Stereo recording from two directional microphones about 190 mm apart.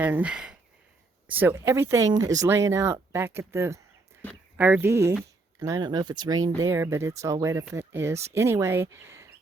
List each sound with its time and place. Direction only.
0.0 s speech: 5° right (ahead or behind)